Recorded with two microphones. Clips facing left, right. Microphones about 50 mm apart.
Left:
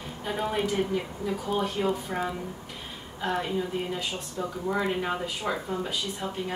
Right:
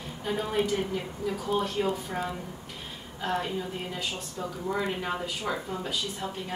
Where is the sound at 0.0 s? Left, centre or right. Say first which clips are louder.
Left 1 dB; centre.